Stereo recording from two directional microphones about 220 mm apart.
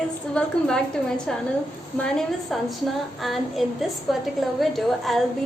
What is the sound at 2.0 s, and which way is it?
A woman's voice, centre (ahead or behind).